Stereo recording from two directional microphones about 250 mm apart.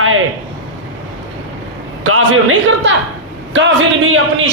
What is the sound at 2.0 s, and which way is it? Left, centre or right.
A man's voice, right.